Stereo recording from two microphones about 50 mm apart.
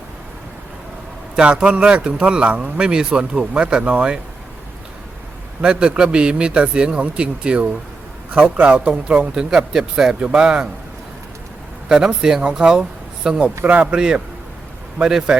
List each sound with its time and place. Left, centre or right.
1.4 s a man's voice: centre
5.6 s a man's voice: centre
11.9 s speech: centre